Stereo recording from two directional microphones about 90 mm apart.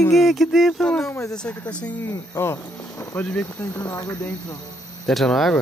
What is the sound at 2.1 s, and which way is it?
Speech, 30° left (ahead or behind).